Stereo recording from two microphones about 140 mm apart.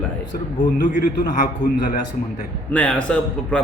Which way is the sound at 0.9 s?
70° left (ahead or behind).